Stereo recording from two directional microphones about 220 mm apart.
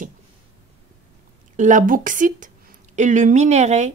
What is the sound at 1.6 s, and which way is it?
Speech, 35° right (ahead or behind).